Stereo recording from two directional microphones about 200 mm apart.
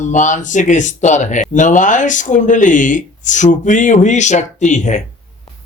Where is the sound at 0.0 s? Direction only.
40° left (ahead or behind).